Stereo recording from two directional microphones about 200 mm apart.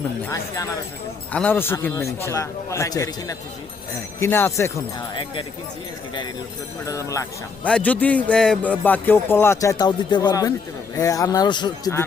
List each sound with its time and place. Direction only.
0.3 s speech: 15° left (ahead or behind)
6.8 s speech: 15° left (ahead or behind)